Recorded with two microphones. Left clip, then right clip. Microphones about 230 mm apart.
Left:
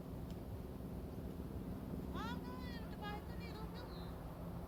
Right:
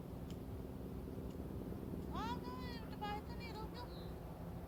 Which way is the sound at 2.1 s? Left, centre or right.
Right.